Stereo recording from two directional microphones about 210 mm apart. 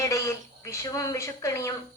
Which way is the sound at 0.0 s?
15° left (ahead or behind).